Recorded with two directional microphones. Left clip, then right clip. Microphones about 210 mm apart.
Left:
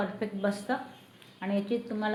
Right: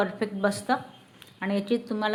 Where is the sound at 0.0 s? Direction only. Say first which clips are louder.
Right 5 dB; 40° right (ahead or behind).